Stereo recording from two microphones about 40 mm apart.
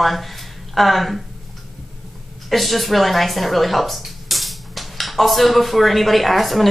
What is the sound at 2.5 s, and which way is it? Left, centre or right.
Speech, centre.